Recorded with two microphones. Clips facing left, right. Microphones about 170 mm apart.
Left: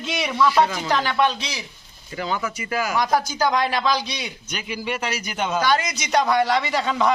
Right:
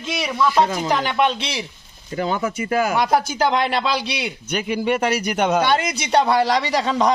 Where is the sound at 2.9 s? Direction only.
25° right (ahead or behind).